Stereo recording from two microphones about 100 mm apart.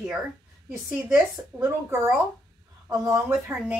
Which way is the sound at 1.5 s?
30° right (ahead or behind).